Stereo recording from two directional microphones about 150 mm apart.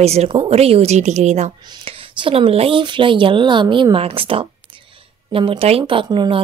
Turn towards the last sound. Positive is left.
turn(degrees=-30)  # may be behind; listen again after turning